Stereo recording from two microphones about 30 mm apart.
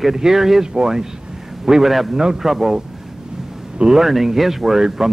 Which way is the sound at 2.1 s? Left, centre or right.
Right.